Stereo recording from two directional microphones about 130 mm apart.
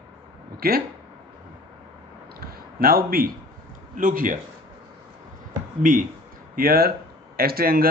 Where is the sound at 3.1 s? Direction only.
90° right.